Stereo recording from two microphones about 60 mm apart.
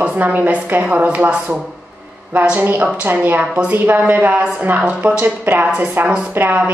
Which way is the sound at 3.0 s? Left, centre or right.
Right.